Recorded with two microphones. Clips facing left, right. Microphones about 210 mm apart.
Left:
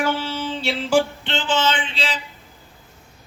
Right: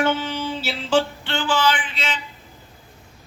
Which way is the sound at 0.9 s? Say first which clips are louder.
Left 1 dB; 20° left (ahead or behind).